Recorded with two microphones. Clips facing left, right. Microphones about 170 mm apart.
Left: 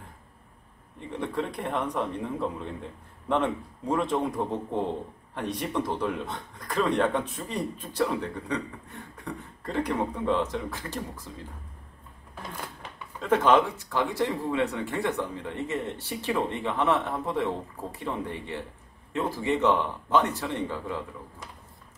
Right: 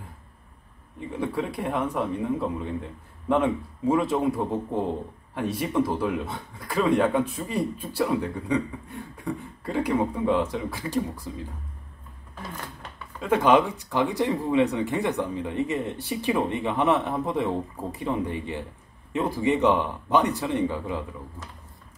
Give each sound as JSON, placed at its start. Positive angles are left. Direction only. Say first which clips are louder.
{"t": 0.9, "sound": "a man's voice", "louder": "right 2 dB", "side_deg": -5}
{"t": 13.2, "sound": "a man's voice", "louder": "right 2 dB", "side_deg": -10}